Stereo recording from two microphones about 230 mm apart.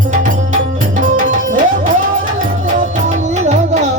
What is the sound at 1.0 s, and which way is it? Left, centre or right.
Music, right.